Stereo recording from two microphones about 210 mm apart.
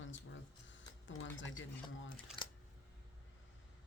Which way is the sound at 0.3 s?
65° left (ahead or behind).